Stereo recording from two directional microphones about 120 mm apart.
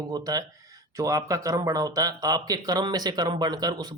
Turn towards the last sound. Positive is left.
turn(degrees=-30)  # may be behind; listen again after turning